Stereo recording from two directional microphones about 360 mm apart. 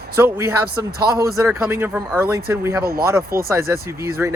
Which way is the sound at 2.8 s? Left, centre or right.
Right.